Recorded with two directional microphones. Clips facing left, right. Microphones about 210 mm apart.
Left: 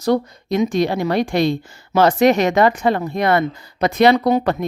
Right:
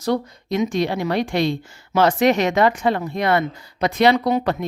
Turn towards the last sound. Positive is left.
turn(degrees=50)  # may be behind; listen again after turning